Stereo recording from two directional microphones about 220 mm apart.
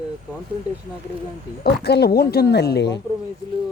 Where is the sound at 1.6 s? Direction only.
45° left (ahead or behind).